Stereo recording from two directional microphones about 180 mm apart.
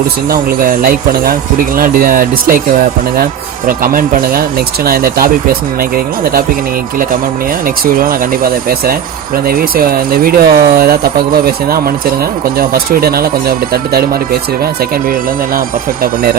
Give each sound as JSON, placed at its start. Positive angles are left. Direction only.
{"t": 0.3, "sound": "speech", "side_deg": -50}
{"t": 3.7, "sound": "speech", "side_deg": -55}
{"t": 7.9, "sound": "speech", "side_deg": -55}
{"t": 12.5, "sound": "speech", "side_deg": -55}